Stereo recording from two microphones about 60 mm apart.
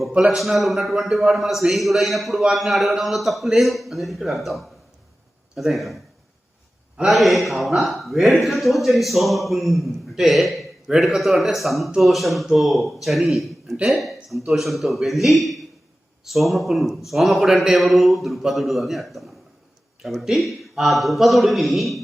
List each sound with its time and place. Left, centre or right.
0.1 s a man's voice: centre
0.3 s a man's voice: centre
7.1 s a man's voice: centre